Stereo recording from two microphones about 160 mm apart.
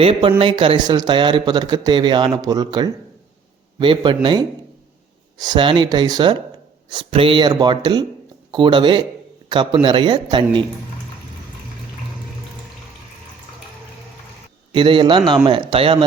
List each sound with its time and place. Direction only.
0.0 s speech: 35° right (ahead or behind)
14.7 s speech: 30° right (ahead or behind)